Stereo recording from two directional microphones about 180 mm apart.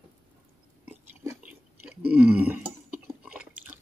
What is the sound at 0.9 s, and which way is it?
Chewing, 10° right (ahead or behind).